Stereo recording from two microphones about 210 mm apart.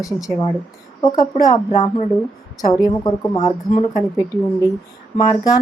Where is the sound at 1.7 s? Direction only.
25° left (ahead or behind).